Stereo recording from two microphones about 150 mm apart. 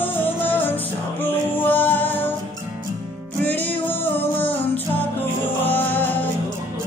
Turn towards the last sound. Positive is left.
turn(degrees=10)  # may be behind; listen again after turning